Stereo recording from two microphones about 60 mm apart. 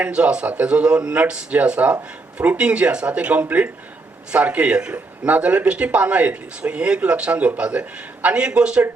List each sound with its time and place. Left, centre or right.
0.0 s a man's voice: centre